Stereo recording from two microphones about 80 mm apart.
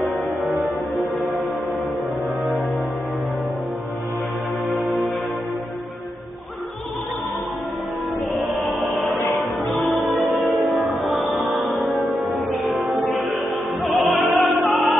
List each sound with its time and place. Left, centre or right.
4.7 s music: centre
8.3 s music: centre
13.8 s opera: centre